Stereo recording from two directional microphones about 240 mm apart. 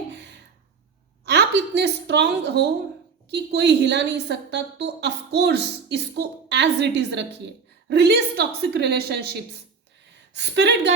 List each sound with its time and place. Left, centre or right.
1.2 s a woman's voice: right